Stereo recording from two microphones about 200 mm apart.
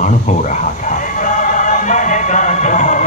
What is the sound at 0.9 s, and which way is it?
Music, 40° left (ahead or behind).